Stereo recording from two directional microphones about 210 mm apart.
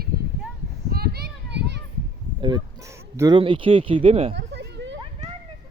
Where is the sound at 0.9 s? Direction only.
50° right (ahead or behind).